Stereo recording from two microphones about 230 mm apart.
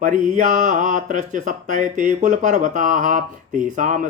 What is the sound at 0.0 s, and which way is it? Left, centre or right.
Speech, right.